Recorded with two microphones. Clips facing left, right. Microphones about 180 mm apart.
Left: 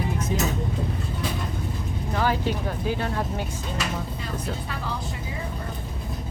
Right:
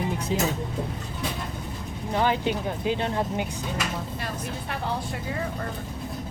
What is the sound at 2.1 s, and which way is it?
Speech, 20° right (ahead or behind).